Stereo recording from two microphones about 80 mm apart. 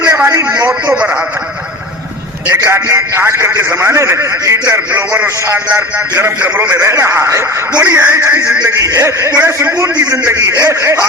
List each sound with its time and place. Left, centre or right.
0.2 s a sound: right
2.5 s a man's voice: right
5.7 s a man's voice: right
6.8 s a man's voice: right
8.6 s a man's voice: right